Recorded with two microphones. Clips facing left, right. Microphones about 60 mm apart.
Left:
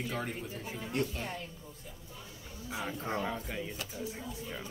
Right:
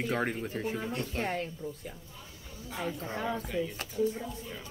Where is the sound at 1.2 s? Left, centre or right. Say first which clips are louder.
Right 7 dB; right.